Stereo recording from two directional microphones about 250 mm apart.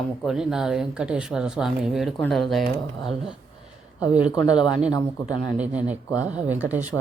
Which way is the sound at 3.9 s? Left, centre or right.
Centre.